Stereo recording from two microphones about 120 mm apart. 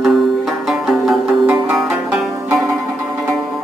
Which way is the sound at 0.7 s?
5° right (ahead or behind).